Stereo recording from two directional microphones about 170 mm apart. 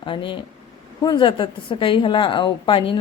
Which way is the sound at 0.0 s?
30° left (ahead or behind).